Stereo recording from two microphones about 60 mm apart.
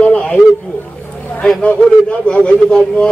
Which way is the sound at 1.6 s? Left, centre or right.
Left.